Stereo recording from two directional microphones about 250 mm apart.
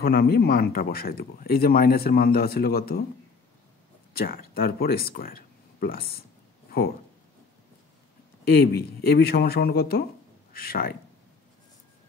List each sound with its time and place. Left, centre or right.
0.0 s speech: left
4.1 s speech: left
8.6 s speech: left